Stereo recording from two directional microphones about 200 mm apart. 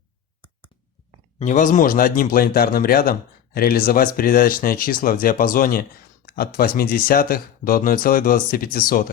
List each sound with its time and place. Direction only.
1.4 s a man's voice: 40° left (ahead or behind)